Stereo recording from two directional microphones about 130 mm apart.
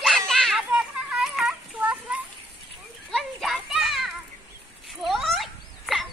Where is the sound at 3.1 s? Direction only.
Centre (ahead or behind).